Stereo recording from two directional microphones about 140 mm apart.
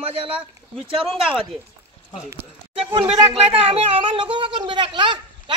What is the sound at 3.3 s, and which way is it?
Speech, 45° right (ahead or behind).